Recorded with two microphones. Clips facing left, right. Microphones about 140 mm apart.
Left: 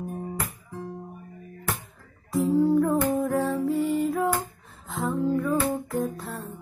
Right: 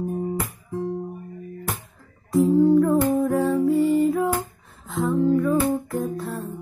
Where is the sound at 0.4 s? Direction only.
20° right (ahead or behind).